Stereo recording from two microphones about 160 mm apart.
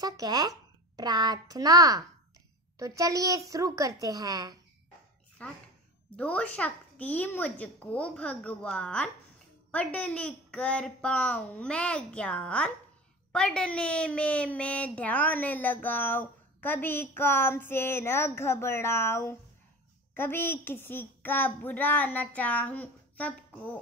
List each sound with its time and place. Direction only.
0.0 s a child's voice: 25° right (ahead or behind)
5.4 s a woman's voice: 10° left (ahead or behind)